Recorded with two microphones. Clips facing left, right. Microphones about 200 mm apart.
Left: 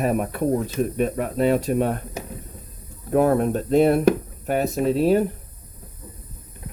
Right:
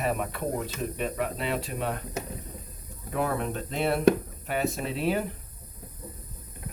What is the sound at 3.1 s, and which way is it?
Speech, 50° left (ahead or behind).